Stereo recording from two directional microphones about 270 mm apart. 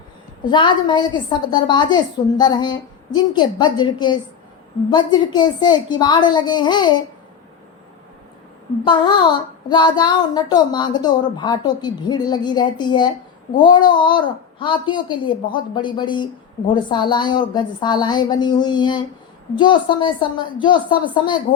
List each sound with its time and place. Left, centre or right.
0.5 s a woman's voice: centre
8.8 s a woman's voice: centre